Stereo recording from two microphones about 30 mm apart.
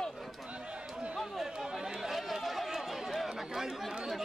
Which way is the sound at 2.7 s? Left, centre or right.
Centre.